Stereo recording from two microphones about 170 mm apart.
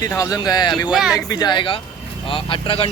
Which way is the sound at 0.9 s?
5° right (ahead or behind).